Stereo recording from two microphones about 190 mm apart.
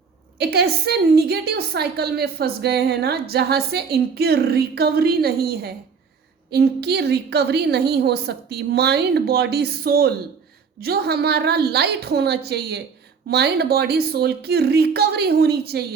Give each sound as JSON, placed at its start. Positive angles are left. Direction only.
{"t": 0.3, "sound": "a woman's voice", "side_deg": -60}